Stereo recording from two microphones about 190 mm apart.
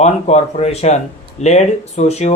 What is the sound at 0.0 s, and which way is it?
Speech, 35° left (ahead or behind).